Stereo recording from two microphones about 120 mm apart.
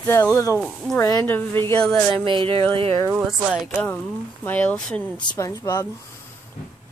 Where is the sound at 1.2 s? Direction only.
15° left (ahead or behind).